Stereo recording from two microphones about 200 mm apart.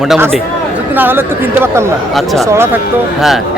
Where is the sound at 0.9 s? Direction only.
10° right (ahead or behind).